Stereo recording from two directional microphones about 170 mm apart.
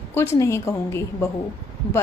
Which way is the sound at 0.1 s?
15° left (ahead or behind).